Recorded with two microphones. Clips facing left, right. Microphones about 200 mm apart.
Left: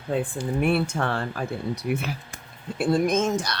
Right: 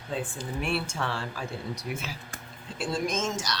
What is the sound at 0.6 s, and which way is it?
Speech, 55° left (ahead or behind).